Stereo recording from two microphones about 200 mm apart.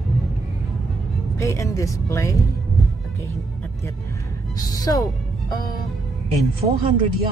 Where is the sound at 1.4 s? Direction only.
15° left (ahead or behind).